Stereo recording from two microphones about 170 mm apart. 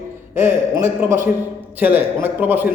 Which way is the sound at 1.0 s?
10° right (ahead or behind).